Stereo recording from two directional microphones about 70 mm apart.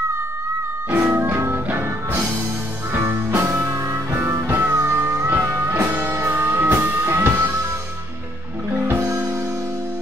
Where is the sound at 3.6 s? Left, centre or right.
Right.